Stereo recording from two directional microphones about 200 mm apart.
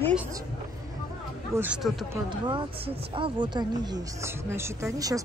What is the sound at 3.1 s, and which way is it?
Speech, 25° right (ahead or behind).